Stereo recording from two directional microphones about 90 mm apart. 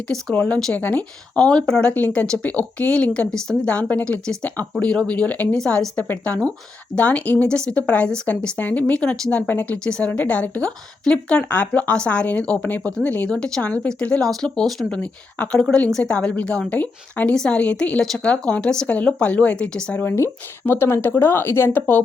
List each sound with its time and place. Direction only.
0.1 s speech: 10° left (ahead or behind)
20.0 s speech: 25° left (ahead or behind)